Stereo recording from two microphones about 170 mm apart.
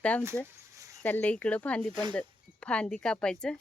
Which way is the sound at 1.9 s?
25° right (ahead or behind).